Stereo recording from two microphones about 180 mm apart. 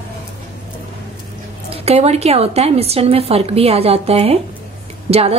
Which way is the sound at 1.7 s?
35° right (ahead or behind).